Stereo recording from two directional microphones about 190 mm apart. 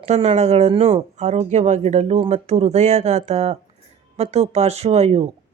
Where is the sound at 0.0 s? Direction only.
35° right (ahead or behind).